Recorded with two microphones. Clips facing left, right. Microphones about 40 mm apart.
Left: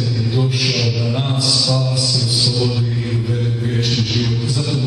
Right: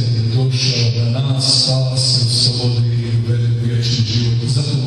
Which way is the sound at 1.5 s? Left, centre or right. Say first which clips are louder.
Even; centre.